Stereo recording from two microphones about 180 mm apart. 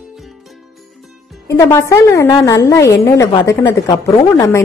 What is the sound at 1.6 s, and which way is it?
A woman's voice, 15° left (ahead or behind).